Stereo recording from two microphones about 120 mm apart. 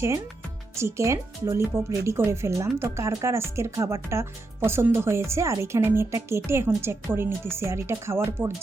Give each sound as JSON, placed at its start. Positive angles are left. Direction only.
{"t": 0.8, "sound": "speech", "side_deg": -25}